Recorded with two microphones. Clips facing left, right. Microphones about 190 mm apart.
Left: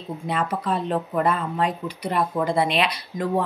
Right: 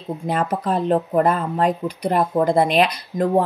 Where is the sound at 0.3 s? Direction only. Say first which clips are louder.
Right 3 dB; 45° right (ahead or behind).